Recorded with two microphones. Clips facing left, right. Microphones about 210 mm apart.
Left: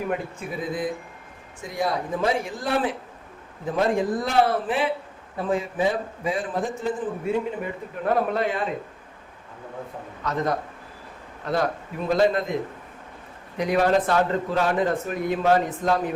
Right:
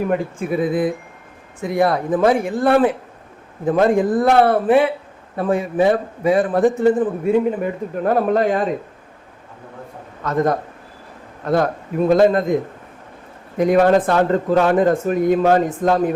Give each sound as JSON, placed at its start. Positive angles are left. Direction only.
{"t": 0.1, "sound": "a man's voice", "side_deg": -55}
{"t": 8.0, "sound": "speech", "side_deg": -45}
{"t": 10.2, "sound": "speech", "side_deg": -50}
{"t": 13.6, "sound": "speech", "side_deg": -50}